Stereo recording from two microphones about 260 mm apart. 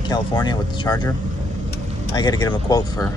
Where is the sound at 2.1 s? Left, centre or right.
Centre.